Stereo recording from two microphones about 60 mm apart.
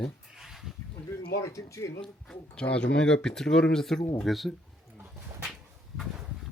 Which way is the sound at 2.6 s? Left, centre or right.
Centre.